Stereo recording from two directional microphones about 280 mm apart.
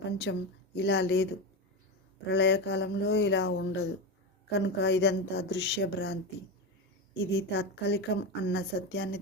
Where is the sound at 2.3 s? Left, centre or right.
Left.